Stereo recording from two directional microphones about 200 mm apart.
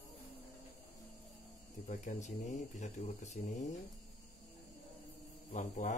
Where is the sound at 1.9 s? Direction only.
35° left (ahead or behind).